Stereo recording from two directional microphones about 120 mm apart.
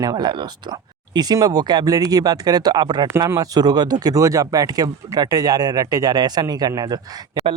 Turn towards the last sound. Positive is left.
turn(degrees=-35)  # may be behind; listen again after turning